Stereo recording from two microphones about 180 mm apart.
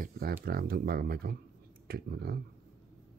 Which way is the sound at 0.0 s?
55° right (ahead or behind).